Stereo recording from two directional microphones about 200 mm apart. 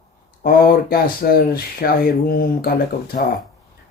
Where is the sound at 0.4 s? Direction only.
45° left (ahead or behind).